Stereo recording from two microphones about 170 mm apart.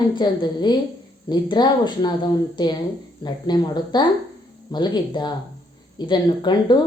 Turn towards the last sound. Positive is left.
turn(degrees=25)  # may be behind; listen again after turning